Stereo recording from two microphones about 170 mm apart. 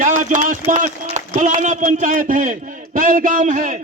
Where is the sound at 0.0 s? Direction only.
50° right (ahead or behind).